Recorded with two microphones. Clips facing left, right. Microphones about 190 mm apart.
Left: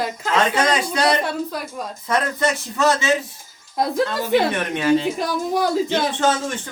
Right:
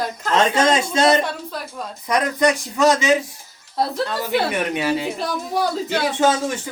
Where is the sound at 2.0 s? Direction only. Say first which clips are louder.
Right 3 dB; 15° right (ahead or behind).